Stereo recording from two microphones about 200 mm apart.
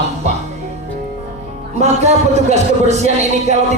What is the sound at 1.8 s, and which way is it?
A man's voice, 35° right (ahead or behind).